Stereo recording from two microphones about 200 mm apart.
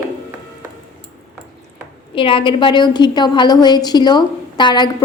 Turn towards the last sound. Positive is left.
turn(degrees=20)  # may be behind; listen again after turning